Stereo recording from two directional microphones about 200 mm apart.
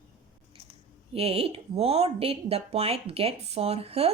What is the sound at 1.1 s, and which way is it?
Speech, 30° right (ahead or behind).